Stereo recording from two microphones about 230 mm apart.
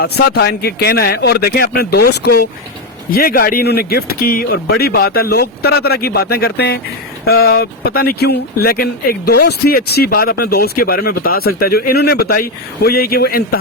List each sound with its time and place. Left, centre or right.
0.0 s speech: left